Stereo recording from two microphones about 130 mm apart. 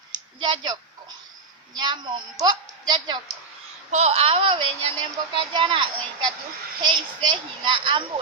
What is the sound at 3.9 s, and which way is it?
A child's voice, 60° right (ahead or behind).